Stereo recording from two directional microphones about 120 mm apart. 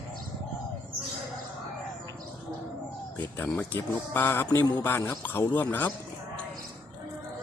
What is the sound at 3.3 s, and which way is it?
Speech, 20° left (ahead or behind).